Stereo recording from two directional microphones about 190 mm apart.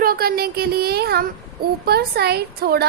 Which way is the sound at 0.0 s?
50° right (ahead or behind).